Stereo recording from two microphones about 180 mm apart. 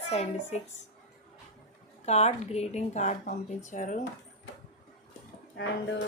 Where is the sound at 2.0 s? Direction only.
40° left (ahead or behind).